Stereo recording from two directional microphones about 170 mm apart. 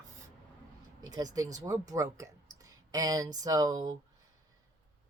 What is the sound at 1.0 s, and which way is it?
Speech, 20° right (ahead or behind).